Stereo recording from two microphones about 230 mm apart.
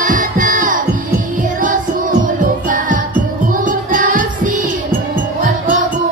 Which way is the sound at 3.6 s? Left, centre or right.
Right.